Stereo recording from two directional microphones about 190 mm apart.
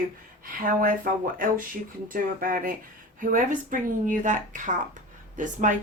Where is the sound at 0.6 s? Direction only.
50° right (ahead or behind).